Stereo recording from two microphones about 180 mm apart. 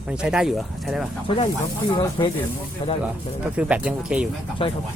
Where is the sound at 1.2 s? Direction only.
30° left (ahead or behind).